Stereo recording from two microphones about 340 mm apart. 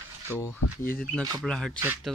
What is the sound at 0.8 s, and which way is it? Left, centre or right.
Speech, centre.